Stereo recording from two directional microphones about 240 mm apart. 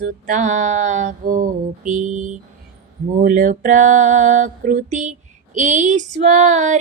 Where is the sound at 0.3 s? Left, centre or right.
Right.